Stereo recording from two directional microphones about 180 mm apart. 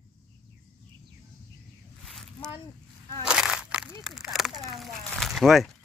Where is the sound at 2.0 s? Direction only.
Centre (ahead or behind).